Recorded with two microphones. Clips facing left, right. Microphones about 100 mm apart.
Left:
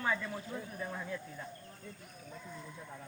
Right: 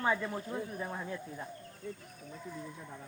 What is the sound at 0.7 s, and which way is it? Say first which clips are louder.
Speech: right 2 dB; 20° right (ahead or behind).